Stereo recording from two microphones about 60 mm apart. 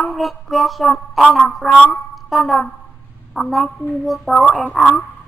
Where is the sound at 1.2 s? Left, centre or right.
Centre.